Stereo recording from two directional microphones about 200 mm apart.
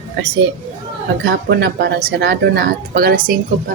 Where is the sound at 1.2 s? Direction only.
50° right (ahead or behind).